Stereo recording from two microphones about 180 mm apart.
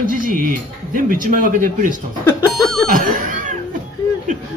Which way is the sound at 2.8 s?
50° right (ahead or behind).